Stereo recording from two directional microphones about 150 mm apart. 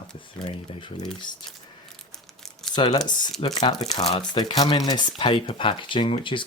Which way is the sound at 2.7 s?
30° left (ahead or behind).